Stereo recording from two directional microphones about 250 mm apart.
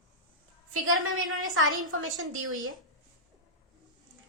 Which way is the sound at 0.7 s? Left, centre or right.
Right.